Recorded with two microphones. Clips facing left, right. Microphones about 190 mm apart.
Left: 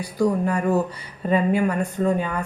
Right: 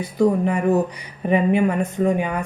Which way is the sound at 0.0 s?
20° right (ahead or behind).